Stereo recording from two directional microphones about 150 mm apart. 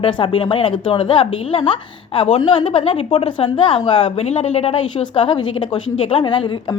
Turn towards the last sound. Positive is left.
turn(degrees=35)  # may be behind; listen again after turning